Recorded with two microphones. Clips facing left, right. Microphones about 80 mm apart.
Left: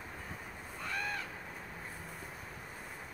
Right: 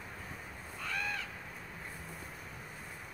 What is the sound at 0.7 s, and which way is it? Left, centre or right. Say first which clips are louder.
Crow: even; left.